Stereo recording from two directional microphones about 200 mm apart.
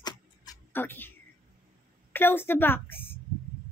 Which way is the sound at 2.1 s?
10° left (ahead or behind).